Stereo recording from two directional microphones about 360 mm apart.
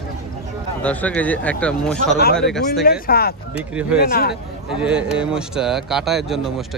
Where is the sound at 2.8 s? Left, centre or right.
Left.